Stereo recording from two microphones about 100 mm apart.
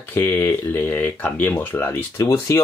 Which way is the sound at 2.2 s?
35° left (ahead or behind).